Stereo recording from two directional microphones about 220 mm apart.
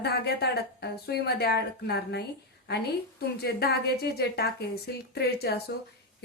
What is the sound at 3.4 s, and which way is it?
A woman's voice, 45° left (ahead or behind).